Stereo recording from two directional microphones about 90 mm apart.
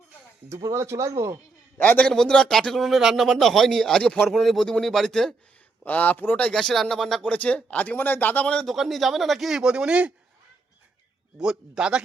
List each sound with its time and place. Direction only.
0.4 s speech: 30° right (ahead or behind)
1.8 s a man's voice: 15° left (ahead or behind)
5.8 s a man's voice: 20° left (ahead or behind); by 7.2 s 5° left (ahead or behind)
7.3 s a man's voice: 15° left (ahead or behind)
8.6 s speech: centre (ahead or behind)
11.3 s a man's voice: 10° right (ahead or behind)